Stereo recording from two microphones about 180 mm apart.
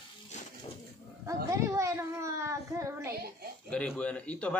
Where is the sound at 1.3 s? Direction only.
15° right (ahead or behind).